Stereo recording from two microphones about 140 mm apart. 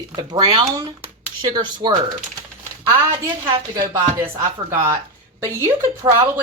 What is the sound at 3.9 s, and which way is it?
A woman's voice, 20° right (ahead or behind).